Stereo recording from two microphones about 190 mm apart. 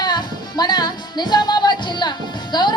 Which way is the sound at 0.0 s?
20° left (ahead or behind).